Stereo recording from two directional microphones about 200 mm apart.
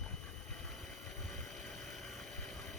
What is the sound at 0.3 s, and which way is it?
Vehicle, 5° left (ahead or behind).